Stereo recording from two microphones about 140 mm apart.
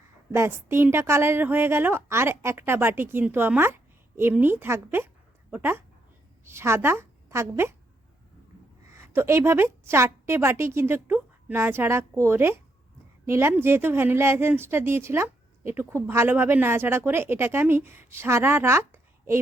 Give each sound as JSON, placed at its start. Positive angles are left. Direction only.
{"t": 0.3, "sound": "a woman's voice", "side_deg": -20}
{"t": 9.0, "sound": "speech", "side_deg": -20}